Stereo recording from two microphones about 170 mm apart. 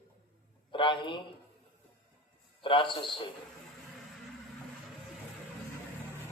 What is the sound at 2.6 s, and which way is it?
Speech, 30° left (ahead or behind).